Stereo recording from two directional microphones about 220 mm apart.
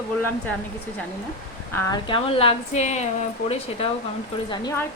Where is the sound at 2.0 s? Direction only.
25° left (ahead or behind).